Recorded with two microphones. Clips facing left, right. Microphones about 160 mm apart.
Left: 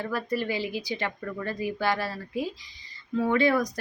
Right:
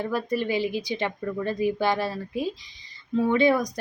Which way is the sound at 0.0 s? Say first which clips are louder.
Right 3 dB; 15° right (ahead or behind).